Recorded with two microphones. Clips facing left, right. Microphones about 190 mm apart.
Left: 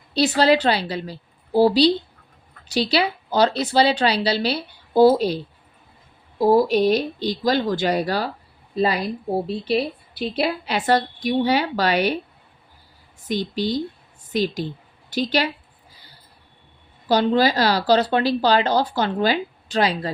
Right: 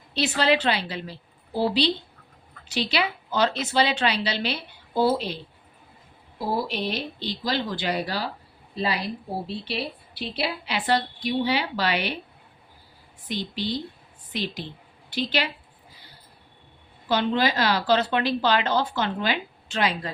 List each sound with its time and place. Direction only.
0.1 s a woman's voice: 40° left (ahead or behind)
6.4 s a woman's voice: 45° left (ahead or behind)
13.2 s a woman's voice: 45° left (ahead or behind)
17.1 s a woman's voice: 35° left (ahead or behind)